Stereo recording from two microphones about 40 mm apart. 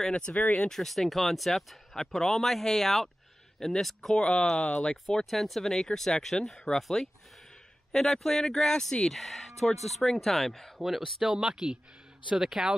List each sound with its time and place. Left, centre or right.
0.0 s speech: centre
0.3 s speech: left
0.7 s speech: centre
4.2 s speech: centre
5.2 s speech: centre
11.2 s speech: centre